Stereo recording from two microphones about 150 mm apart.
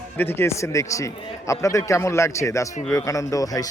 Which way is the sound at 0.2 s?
15° left (ahead or behind).